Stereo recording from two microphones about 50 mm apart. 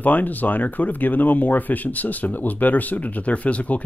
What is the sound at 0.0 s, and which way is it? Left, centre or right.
Speech, left.